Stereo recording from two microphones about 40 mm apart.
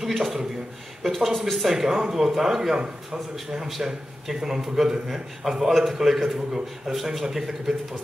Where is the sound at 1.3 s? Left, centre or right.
Centre.